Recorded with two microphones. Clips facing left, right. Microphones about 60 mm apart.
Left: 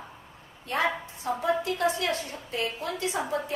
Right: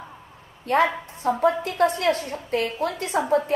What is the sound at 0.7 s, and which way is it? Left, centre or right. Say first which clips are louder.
A woman's voice: right 7 dB; right.